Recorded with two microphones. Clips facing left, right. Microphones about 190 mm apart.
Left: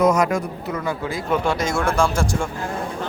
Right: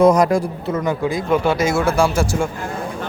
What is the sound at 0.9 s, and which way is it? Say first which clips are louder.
Speech: right 5 dB; 15° right (ahead or behind).